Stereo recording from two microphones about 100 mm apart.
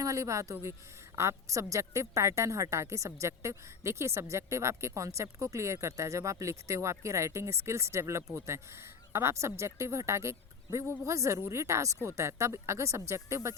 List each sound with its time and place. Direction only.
0.0 s a woman's voice: 30° right (ahead or behind)